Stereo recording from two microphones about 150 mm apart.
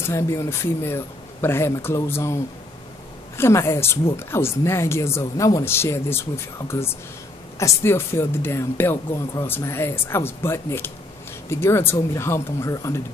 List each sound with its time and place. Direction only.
0.0 s speech: 20° left (ahead or behind)